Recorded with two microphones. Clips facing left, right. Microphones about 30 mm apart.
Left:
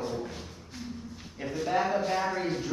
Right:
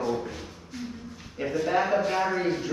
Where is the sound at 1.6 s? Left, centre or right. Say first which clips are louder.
Right 3 dB; right.